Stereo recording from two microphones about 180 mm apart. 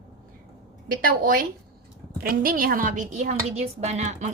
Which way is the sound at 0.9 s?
50° right (ahead or behind).